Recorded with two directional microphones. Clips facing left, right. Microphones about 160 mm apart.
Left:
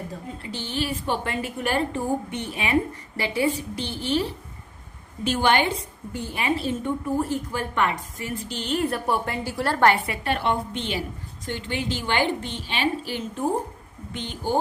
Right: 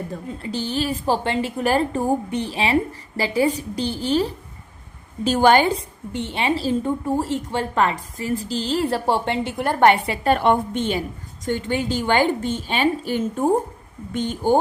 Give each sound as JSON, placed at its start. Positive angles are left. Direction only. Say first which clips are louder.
{"t": 0.5, "sound": "a woman's voice", "louder": "right 4 dB", "side_deg": -40}
{"t": 6.1, "sound": "a woman's voice", "louder": "right 3 dB", "side_deg": -25}
{"t": 10.2, "sound": "a woman's voice", "louder": "right 8 dB", "side_deg": -45}